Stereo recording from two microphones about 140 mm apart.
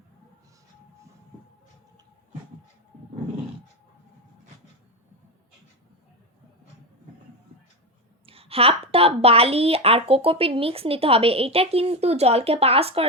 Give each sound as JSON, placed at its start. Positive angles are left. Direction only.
{"t": 8.3, "sound": "a woman's voice", "side_deg": -45}